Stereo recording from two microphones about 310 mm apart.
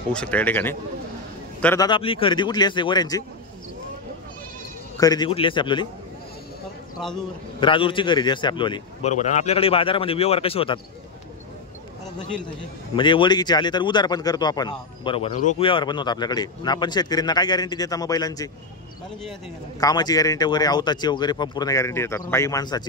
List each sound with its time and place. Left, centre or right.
0.1 s speech: centre
4.9 s speech: centre
7.0 s speech: centre
7.6 s speech: centre
12.9 s speech: centre
19.8 s speech: centre